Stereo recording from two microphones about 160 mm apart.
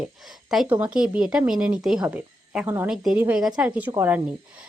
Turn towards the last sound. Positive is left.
turn(degrees=-15)  # may be behind; listen again after turning